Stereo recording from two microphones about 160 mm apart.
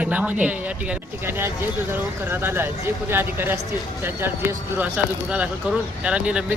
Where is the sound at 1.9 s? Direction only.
15° right (ahead or behind).